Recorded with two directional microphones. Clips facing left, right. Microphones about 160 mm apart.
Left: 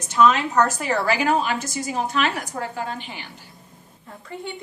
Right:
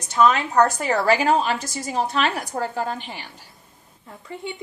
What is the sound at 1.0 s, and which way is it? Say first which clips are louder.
A woman's voice: right 3 dB; 35° right (ahead or behind).